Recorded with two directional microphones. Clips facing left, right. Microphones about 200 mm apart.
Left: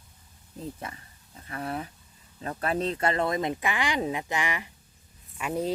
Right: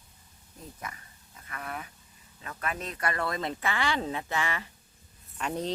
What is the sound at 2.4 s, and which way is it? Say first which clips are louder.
Speech: left 8 dB; 30° left (ahead or behind).